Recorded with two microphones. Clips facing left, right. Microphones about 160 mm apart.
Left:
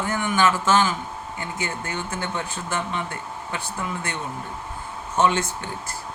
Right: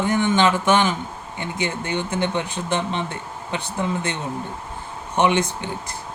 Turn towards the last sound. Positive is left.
turn(degrees=-15)  # may be behind; listen again after turning